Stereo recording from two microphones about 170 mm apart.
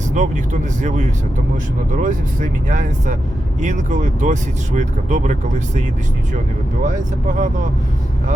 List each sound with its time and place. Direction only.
0.1 s speech: 45° right (ahead or behind)
6.8 s speech: 50° right (ahead or behind)